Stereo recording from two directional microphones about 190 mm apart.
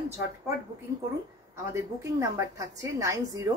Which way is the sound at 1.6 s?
15° right (ahead or behind).